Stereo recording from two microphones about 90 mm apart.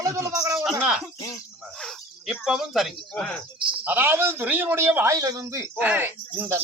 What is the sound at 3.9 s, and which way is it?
A man's voice, 20° right (ahead or behind).